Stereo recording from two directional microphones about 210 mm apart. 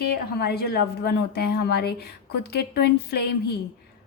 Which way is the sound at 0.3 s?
50° left (ahead or behind).